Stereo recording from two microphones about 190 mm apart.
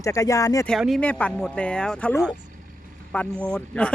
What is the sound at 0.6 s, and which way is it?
Speech, centre (ahead or behind).